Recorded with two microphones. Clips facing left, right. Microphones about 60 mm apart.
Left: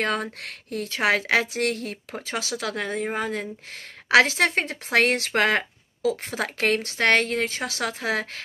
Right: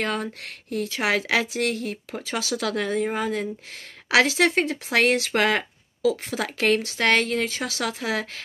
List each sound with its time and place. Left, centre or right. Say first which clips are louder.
0.0 s speech: left 1 dB; left
2.1 s speech: right 2 dB; left